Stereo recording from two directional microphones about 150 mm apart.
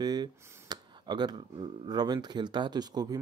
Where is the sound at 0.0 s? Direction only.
25° right (ahead or behind).